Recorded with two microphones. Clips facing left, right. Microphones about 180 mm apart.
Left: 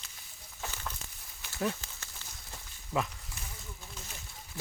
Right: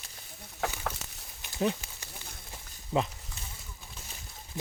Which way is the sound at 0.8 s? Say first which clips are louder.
Right 6 dB; 75° right (ahead or behind).